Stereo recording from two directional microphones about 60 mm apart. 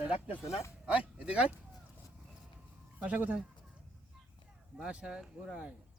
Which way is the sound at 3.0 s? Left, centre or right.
Right.